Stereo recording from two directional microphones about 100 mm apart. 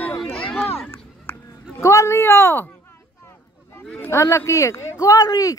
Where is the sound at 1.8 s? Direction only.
30° left (ahead or behind).